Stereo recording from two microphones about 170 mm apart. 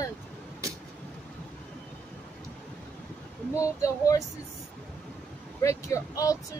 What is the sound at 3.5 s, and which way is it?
Speech, 20° left (ahead or behind).